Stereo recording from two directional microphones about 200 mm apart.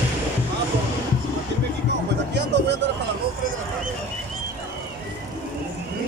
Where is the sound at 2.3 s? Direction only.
60° right (ahead or behind).